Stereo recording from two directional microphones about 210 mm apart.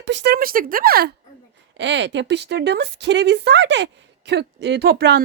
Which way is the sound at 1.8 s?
55° right (ahead or behind).